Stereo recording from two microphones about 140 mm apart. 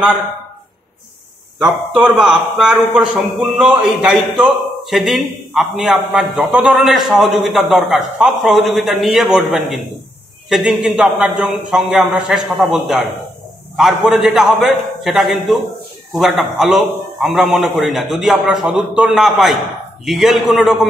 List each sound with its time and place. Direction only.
2.0 s a man's voice: 10° right (ahead or behind)